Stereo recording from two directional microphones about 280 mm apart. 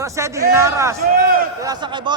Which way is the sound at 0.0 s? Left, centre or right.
Centre.